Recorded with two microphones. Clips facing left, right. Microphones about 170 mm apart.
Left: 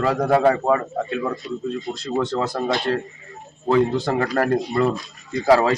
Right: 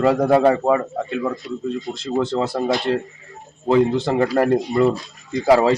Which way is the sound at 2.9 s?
15° right (ahead or behind).